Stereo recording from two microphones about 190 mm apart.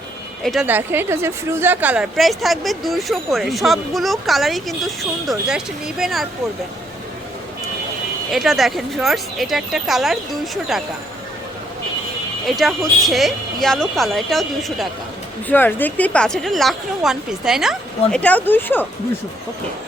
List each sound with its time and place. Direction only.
0.4 s a woman's voice: 5° right (ahead or behind)
8.3 s a woman's voice: centre (ahead or behind)
12.5 s a woman's voice: centre (ahead or behind)
18.2 s speech: 10° left (ahead or behind)